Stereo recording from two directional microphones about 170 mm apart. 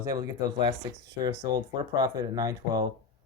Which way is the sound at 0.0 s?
25° right (ahead or behind).